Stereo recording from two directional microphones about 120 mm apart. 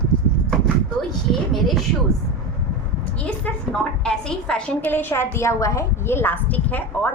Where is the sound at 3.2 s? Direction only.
5° left (ahead or behind).